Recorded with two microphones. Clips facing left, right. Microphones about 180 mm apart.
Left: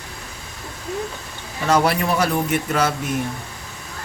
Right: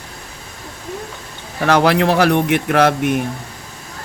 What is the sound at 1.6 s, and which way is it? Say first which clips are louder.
A man's voice: right 5 dB; 70° right (ahead or behind).